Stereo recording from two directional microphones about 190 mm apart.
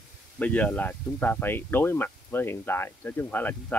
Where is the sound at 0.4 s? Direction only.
5° left (ahead or behind).